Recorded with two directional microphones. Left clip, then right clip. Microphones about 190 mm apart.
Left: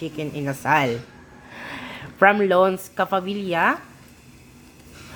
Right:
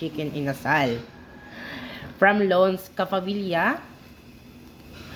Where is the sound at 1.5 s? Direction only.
25° left (ahead or behind).